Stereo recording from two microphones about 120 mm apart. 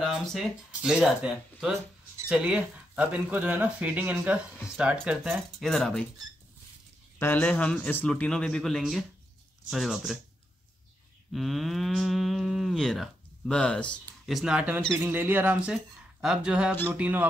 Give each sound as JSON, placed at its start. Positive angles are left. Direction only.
{"t": 0.0, "sound": "moo", "side_deg": 0}
{"t": 2.2, "sound": "speech", "side_deg": -10}
{"t": 5.0, "sound": "moo", "side_deg": -5}
{"t": 7.2, "sound": "speech", "side_deg": 15}
{"t": 9.7, "sound": "moo", "side_deg": 0}
{"t": 11.3, "sound": "moo", "side_deg": 0}
{"t": 14.2, "sound": "speech", "side_deg": -5}
{"t": 15.7, "sound": "speech", "side_deg": -5}